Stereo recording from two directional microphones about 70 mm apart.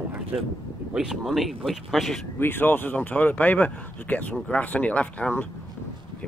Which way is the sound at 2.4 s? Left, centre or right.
Left.